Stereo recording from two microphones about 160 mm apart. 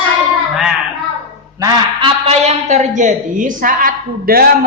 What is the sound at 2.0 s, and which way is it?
A woman's voice, 45° right (ahead or behind).